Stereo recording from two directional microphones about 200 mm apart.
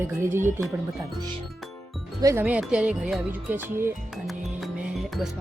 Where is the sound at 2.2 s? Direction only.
10° right (ahead or behind).